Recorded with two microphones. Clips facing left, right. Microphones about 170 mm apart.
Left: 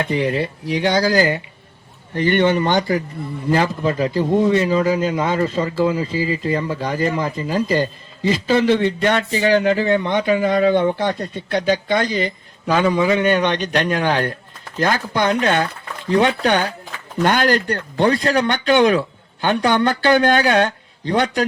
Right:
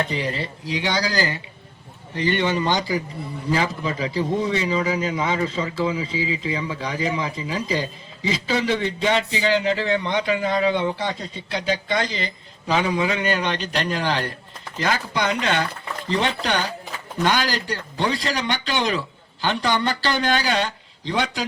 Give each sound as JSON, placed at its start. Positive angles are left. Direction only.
{"t": 0.0, "sound": "a man's voice", "side_deg": 60}